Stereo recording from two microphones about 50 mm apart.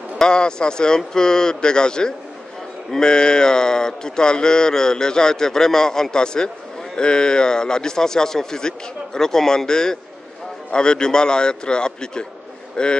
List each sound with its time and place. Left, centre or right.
0.2 s speech: centre